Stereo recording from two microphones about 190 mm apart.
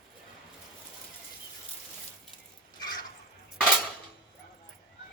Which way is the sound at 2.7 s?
20° left (ahead or behind).